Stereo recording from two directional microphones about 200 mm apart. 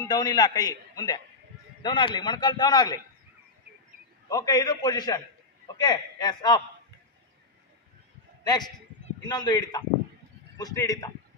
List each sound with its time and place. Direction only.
0.0 s a man's voice: 20° left (ahead or behind)
4.3 s a man's voice: 20° left (ahead or behind)
9.3 s a man's voice: 20° left (ahead or behind)